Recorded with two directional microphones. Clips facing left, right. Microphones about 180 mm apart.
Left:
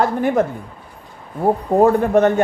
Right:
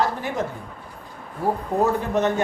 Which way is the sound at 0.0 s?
55° left (ahead or behind).